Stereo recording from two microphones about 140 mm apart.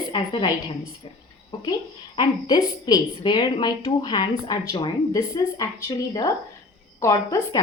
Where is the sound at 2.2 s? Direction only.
30° left (ahead or behind).